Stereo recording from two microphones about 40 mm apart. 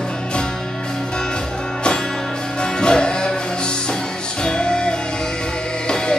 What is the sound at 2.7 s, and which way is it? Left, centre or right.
Music, centre.